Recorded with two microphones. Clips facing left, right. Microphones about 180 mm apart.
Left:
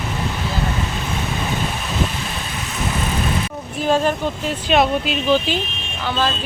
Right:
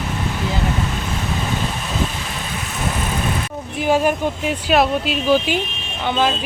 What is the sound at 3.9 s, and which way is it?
Speech, 10° right (ahead or behind).